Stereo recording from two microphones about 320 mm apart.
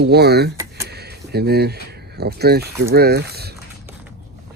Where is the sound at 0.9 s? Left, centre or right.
Right.